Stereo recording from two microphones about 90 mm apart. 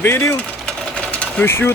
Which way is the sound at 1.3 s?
25° left (ahead or behind).